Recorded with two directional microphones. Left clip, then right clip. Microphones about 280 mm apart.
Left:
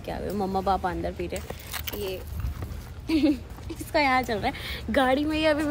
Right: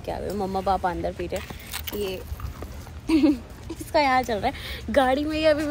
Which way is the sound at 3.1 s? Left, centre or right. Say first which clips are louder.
Right 3 dB; right.